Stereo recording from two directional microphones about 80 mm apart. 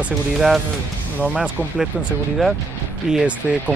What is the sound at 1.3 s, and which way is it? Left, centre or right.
Speech, centre.